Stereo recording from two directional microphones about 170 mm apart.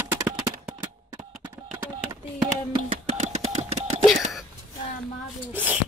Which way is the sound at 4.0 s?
Centre (ahead or behind).